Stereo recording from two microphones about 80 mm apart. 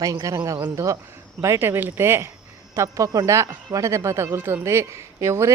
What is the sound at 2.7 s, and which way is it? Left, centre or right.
A woman's voice, right.